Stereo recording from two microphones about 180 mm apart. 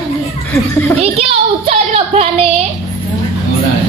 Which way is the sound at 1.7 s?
35° right (ahead or behind).